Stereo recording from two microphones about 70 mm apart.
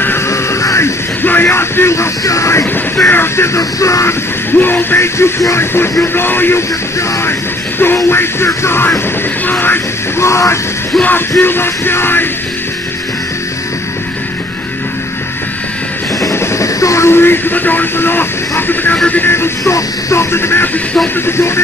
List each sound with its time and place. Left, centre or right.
0.3 s music: left
1.2 s speech: left
4.6 s speech: left
7.8 s speech: left
9.5 s music: left
10.2 s music: left
11.0 s speech: left
16.2 s speech: left
19.0 s music: left
19.6 s speech: left